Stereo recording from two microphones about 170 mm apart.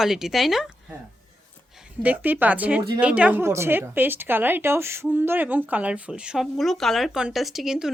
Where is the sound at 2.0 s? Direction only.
10° right (ahead or behind).